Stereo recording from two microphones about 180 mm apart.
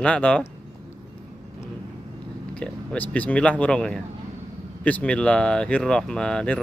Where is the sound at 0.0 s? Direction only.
5° left (ahead or behind).